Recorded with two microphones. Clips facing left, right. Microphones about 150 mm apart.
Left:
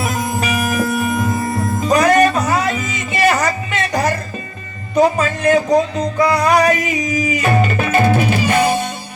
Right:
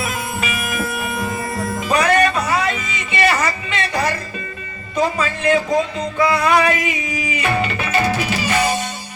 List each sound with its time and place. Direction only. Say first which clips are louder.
0.0 s music: left 4 dB; 40° left (ahead or behind)
1.9 s music: left 4 dB; 45° left (ahead or behind)